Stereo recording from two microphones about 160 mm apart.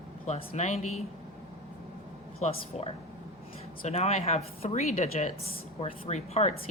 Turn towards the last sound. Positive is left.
turn(degrees=45)  # may be behind; listen again after turning